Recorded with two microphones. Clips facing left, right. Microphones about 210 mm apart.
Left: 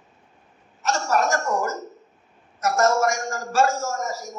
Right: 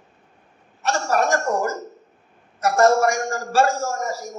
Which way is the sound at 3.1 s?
30° right (ahead or behind).